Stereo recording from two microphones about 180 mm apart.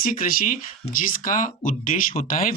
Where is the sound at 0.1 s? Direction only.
50° left (ahead or behind).